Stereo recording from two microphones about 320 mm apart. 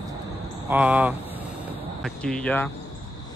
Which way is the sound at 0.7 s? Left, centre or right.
Centre.